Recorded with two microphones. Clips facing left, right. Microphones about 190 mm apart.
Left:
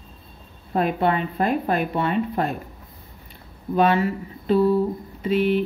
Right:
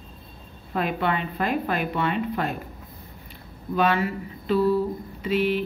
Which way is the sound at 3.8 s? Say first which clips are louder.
Left 3 dB; 40° left (ahead or behind).